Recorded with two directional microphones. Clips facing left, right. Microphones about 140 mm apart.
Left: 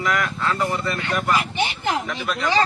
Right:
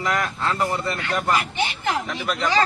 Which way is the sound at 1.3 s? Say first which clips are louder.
Left 1 dB; 25° left (ahead or behind).